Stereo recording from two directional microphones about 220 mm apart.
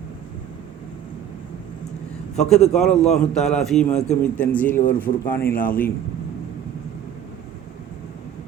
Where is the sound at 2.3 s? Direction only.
Centre (ahead or behind).